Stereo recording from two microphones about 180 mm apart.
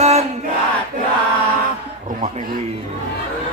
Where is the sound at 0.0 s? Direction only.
40° right (ahead or behind).